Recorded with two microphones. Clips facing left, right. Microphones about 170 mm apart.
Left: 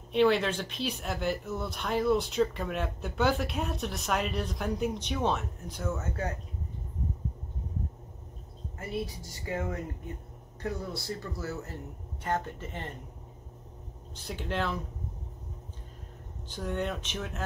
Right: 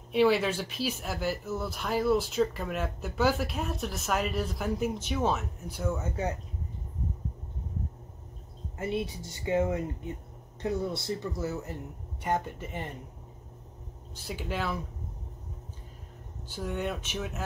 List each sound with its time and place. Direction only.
0.1 s speech: 5° right (ahead or behind)
9.5 s speech: 20° right (ahead or behind)
14.1 s speech: 5° right (ahead or behind)
16.4 s speech: 5° right (ahead or behind)